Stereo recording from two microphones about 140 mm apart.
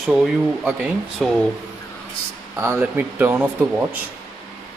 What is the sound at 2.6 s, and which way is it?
A man's voice, 15° right (ahead or behind).